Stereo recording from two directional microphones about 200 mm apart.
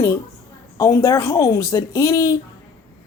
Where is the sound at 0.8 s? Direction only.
15° left (ahead or behind).